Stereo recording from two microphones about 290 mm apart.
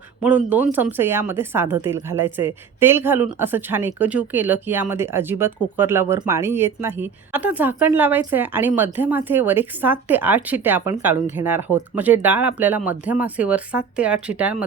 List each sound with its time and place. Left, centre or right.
0.2 s a woman's voice: centre